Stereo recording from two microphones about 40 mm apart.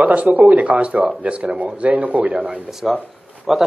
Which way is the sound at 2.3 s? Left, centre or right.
Right.